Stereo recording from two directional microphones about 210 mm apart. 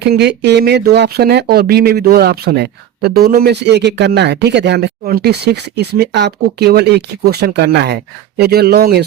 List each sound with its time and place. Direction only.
0.0 s speech: 55° right (ahead or behind)